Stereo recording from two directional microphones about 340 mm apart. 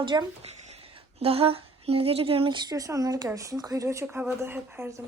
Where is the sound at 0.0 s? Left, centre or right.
Centre.